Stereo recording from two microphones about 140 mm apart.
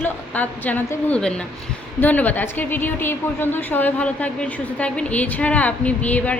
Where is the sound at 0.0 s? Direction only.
10° left (ahead or behind).